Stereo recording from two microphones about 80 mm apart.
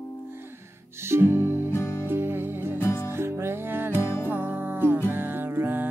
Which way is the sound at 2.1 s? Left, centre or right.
Right.